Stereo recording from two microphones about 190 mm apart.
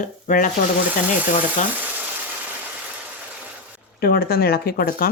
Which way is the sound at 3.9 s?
55° left (ahead or behind).